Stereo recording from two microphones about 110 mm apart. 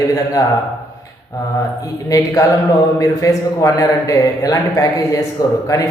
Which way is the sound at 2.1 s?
30° left (ahead or behind).